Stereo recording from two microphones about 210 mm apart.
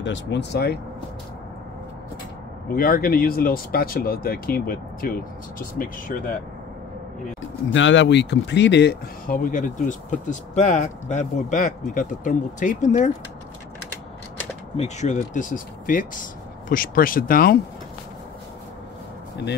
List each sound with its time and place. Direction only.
0.0 s speech: 55° left (ahead or behind)
2.7 s speech: 45° left (ahead or behind)
7.7 s speech: 60° left (ahead or behind); by 13.1 s 35° left (ahead or behind)
14.8 s speech: 35° left (ahead or behind)